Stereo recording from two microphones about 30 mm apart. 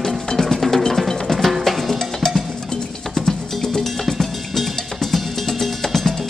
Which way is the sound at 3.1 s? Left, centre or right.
Centre.